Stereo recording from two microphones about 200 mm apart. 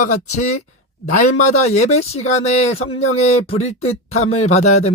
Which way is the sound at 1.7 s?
35° left (ahead or behind).